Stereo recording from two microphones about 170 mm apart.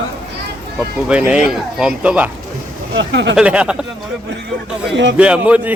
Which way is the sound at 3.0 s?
90° right.